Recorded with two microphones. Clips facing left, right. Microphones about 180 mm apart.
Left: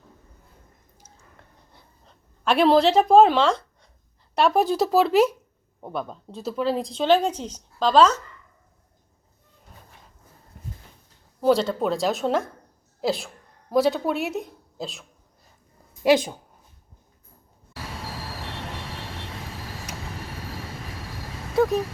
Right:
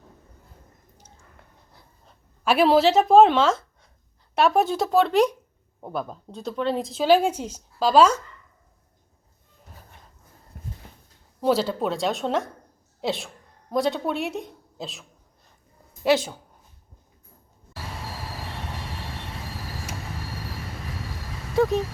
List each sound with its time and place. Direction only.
2.4 s a woman's voice: 5° right (ahead or behind)
11.3 s a woman's voice: centre (ahead or behind)
16.0 s speech: 15° left (ahead or behind)
21.5 s a sound: centre (ahead or behind)